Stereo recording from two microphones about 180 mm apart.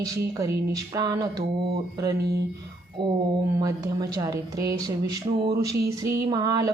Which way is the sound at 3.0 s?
25° right (ahead or behind).